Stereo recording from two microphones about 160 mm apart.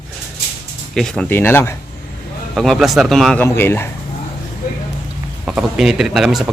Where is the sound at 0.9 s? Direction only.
5° left (ahead or behind).